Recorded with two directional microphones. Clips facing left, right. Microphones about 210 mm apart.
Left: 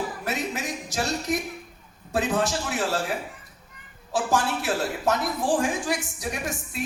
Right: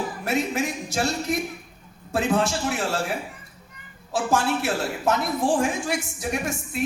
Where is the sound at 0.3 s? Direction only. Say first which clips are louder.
Right 7 dB; 25° right (ahead or behind).